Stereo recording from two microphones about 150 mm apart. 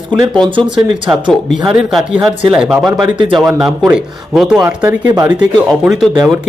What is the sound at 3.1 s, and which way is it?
Speech, 35° right (ahead or behind).